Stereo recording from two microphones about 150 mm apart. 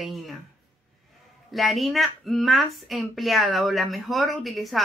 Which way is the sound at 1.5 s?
Centre (ahead or behind).